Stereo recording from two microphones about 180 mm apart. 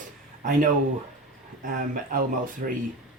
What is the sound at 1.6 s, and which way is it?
Speech, 50° right (ahead or behind).